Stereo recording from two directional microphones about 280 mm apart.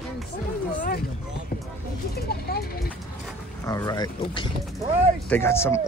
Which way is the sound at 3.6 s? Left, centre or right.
Centre.